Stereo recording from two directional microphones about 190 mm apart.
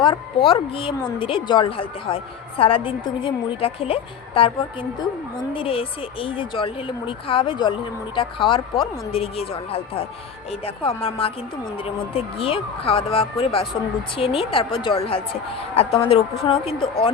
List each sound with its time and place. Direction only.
0.0 s a woman's voice: 30° left (ahead or behind)